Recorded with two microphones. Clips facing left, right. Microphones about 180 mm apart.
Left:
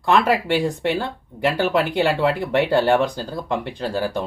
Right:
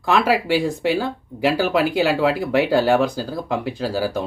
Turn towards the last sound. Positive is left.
turn(degrees=-5)  # may be behind; listen again after turning